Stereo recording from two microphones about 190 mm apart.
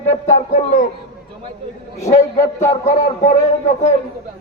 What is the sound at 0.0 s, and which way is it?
Speech, 40° left (ahead or behind).